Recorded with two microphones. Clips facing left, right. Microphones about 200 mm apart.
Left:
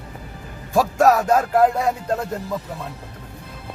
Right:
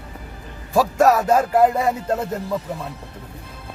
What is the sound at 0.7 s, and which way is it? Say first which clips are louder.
Speech: even; centre (ahead or behind).